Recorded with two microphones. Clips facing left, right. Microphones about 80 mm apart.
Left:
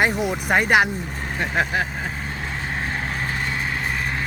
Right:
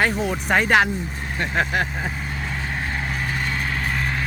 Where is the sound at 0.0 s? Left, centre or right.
Centre.